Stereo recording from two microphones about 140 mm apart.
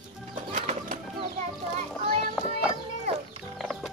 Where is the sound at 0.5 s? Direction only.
65° right (ahead or behind).